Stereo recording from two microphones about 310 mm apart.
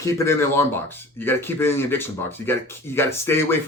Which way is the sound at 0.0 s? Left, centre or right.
Centre.